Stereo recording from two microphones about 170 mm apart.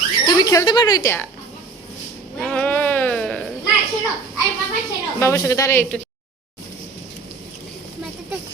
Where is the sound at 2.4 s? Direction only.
5° left (ahead or behind).